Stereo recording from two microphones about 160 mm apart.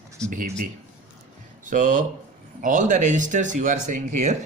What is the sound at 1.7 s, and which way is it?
Speech, 50° right (ahead or behind).